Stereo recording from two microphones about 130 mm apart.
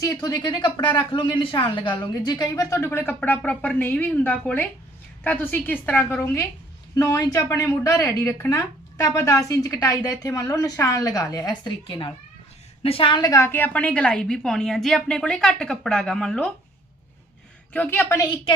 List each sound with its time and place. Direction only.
0.0 s a woman's voice: 30° left (ahead or behind); by 16.5 s 5° left (ahead or behind)
17.7 s speech: 20° left (ahead or behind)